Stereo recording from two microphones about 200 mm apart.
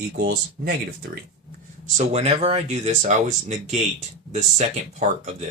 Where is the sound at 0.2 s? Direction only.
55° right (ahead or behind).